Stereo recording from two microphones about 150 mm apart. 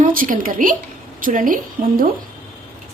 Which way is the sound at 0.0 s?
65° right (ahead or behind).